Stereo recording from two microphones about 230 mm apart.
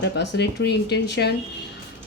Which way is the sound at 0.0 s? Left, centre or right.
Left.